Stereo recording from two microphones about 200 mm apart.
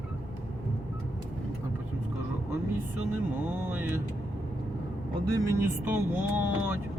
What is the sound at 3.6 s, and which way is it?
Speech, 10° right (ahead or behind).